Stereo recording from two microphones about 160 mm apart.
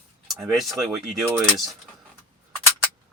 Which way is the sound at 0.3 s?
Centre (ahead or behind).